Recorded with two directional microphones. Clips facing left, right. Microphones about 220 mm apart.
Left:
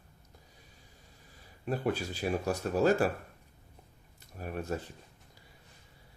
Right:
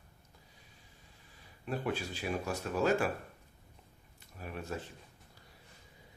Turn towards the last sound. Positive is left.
turn(degrees=45)  # may be behind; listen again after turning